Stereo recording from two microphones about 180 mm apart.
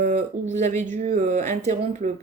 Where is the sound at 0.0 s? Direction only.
45° right (ahead or behind).